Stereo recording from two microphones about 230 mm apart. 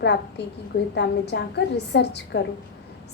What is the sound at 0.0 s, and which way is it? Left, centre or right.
A woman's voice, left.